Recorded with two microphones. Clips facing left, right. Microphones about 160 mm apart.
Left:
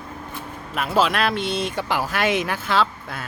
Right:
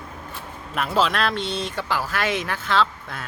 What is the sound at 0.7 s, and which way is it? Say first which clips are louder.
Speech: left 1 dB; 5° left (ahead or behind).